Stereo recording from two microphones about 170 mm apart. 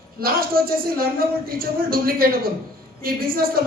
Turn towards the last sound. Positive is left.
turn(degrees=-60)  # may be behind; listen again after turning